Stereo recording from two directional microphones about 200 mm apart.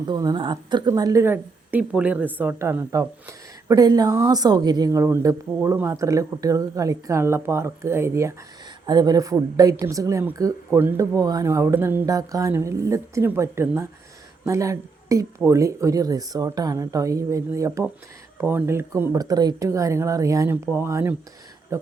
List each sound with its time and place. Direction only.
0.1 s speech: 20° right (ahead or behind)